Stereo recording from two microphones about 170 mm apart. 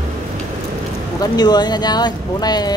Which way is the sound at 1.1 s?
25° left (ahead or behind).